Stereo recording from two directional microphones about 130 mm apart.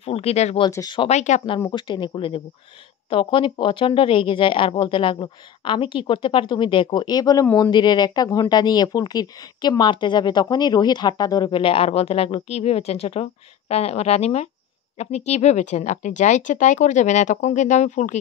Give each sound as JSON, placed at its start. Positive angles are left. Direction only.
{"t": 0.0, "sound": "speech", "side_deg": 50}
{"t": 0.7, "sound": "speech", "side_deg": 25}
{"t": 0.9, "sound": "speech", "side_deg": 60}
{"t": 1.8, "sound": "speech", "side_deg": 35}